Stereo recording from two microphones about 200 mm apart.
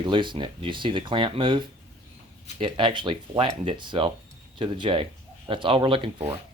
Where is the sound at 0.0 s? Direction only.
25° right (ahead or behind).